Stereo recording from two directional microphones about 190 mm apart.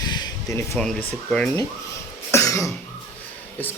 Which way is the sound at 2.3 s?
15° left (ahead or behind).